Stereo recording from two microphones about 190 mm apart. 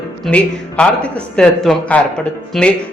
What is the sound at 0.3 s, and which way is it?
A man's voice, 5° left (ahead or behind).